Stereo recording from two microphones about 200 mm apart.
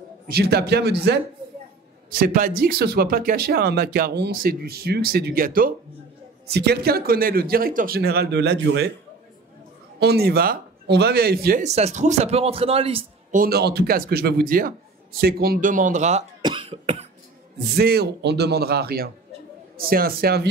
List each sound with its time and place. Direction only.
0.3 s speech: 50° right (ahead or behind)
9.9 s speech: 55° right (ahead or behind)
11.6 s speech: 35° right (ahead or behind)
13.4 s speech: 50° right (ahead or behind); by 16.3 s 35° right (ahead or behind)
16.4 s cough: 25° right (ahead or behind)
17.7 s speech: 50° right (ahead or behind)